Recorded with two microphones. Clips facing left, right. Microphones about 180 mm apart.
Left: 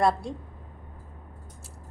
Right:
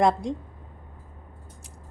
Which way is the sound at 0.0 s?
15° right (ahead or behind).